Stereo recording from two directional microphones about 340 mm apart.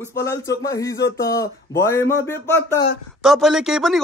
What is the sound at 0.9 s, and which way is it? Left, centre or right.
Speech, left.